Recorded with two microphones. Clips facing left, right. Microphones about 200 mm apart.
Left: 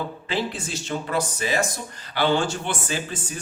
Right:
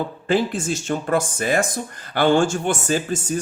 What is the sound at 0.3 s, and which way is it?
Speech, 45° right (ahead or behind).